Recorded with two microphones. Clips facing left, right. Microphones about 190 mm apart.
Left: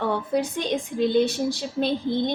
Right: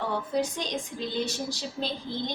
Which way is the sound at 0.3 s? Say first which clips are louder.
Left 3 dB; 60° left (ahead or behind).